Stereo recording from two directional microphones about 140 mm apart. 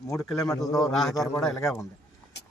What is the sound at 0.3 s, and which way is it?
Speech, 25° left (ahead or behind).